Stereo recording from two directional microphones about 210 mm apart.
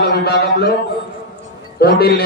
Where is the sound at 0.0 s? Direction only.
50° left (ahead or behind).